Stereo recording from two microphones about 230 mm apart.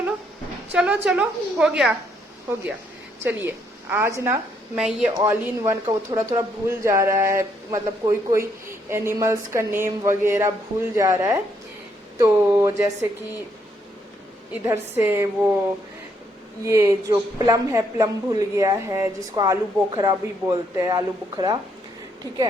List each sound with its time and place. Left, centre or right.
0.7 s a woman's voice: centre
3.2 s a woman's voice: centre
5.1 s speech: centre
14.5 s speech: centre
16.6 s speech: centre